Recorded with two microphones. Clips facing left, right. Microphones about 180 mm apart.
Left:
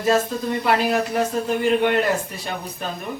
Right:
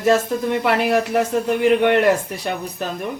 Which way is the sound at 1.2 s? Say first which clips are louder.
Right 3 dB; 75° right (ahead or behind).